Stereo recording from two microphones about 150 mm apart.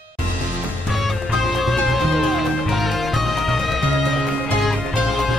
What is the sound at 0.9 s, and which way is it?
Music, centre (ahead or behind).